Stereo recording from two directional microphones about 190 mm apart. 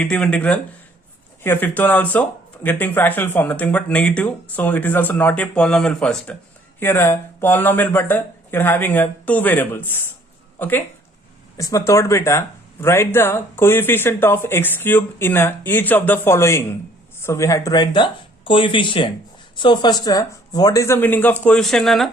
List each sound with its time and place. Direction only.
0.0 s speech: 5° left (ahead or behind)